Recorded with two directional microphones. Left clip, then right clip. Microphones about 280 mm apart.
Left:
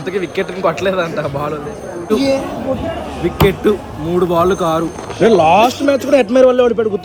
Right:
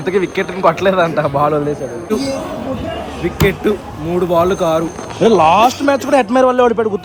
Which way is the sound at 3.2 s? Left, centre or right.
Centre.